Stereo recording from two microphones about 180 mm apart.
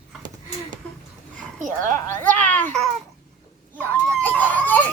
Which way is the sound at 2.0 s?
15° left (ahead or behind).